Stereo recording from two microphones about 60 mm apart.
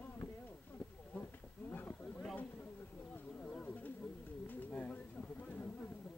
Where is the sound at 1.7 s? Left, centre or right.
Left.